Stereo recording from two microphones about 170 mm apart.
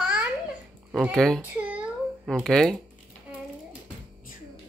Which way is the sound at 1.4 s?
10° right (ahead or behind).